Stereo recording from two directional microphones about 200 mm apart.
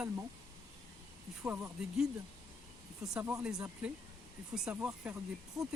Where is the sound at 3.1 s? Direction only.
15° right (ahead or behind).